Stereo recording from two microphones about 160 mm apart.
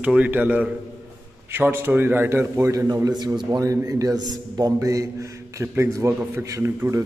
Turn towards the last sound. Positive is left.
turn(degrees=-20)  # may be behind; listen again after turning